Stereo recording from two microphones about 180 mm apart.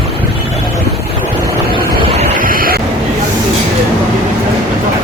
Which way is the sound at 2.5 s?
55° right (ahead or behind).